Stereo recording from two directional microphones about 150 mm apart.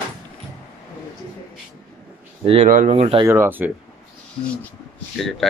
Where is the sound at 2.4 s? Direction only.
40° right (ahead or behind).